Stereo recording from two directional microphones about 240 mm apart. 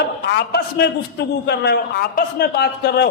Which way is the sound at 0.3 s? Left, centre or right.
Left.